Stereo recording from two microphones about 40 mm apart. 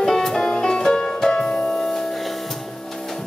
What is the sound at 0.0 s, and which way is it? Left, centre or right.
Music, centre.